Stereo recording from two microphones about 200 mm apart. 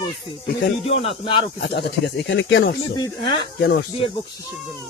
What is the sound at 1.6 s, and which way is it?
Speech, 60° left (ahead or behind).